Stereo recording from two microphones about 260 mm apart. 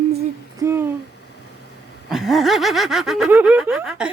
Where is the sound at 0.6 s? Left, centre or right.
Centre.